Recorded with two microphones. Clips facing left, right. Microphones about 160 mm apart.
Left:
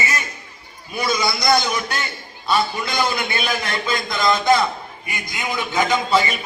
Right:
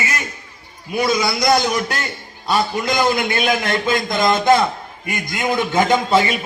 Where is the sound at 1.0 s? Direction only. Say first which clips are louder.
Right 2 dB; 40° right (ahead or behind).